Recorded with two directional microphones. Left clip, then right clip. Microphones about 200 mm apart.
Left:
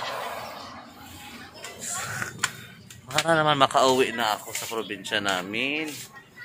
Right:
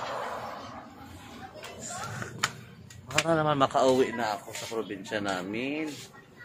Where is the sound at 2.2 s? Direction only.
10° left (ahead or behind).